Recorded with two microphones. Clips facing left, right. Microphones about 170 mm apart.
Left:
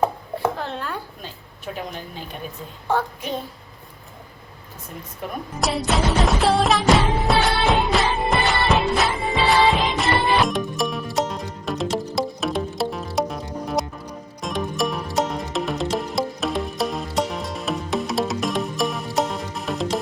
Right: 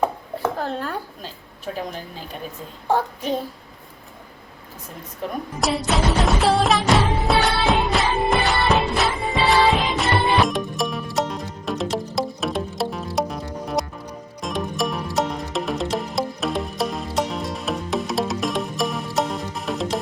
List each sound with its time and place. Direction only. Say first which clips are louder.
0.6 s speech: right 2 dB; 40° right (ahead or behind)
5.5 s music: even; centre (ahead or behind)